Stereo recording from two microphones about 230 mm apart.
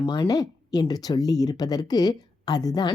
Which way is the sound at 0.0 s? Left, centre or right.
Left.